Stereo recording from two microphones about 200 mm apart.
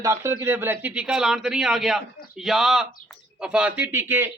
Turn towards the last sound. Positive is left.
turn(degrees=-10)  # may be behind; listen again after turning